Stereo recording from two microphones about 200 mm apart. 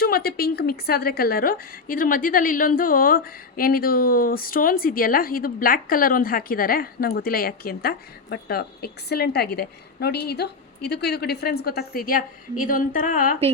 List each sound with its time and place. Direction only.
0.0 s a woman's voice: 50° left (ahead or behind)